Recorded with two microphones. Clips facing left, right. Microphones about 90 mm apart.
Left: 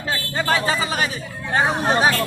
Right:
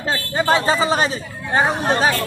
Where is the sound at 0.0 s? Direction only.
20° right (ahead or behind).